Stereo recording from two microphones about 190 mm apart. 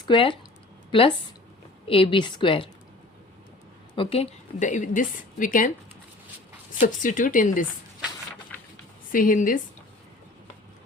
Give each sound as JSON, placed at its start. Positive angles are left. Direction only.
{"t": 0.0, "sound": "a woman's voice", "side_deg": 25}
{"t": 3.9, "sound": "a woman's voice", "side_deg": 30}
{"t": 6.7, "sound": "speech", "side_deg": 45}
{"t": 9.1, "sound": "speech", "side_deg": 45}